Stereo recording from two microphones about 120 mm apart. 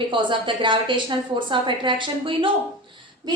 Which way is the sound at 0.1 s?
45° right (ahead or behind).